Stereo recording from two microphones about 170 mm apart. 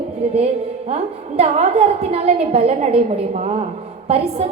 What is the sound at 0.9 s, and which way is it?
Speech, 35° right (ahead or behind).